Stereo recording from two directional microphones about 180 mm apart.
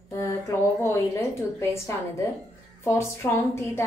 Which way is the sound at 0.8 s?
15° left (ahead or behind).